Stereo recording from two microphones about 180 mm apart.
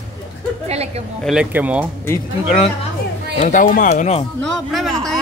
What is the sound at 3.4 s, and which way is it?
Speech, 45° left (ahead or behind).